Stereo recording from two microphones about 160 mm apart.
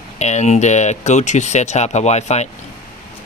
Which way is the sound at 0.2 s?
45° left (ahead or behind).